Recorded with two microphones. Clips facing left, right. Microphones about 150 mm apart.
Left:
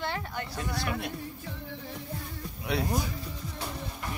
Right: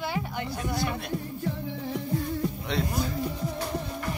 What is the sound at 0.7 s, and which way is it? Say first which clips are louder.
Speech: right 3 dB; 20° right (ahead or behind).